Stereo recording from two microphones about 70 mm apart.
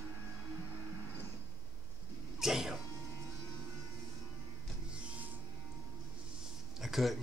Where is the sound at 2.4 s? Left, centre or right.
Centre.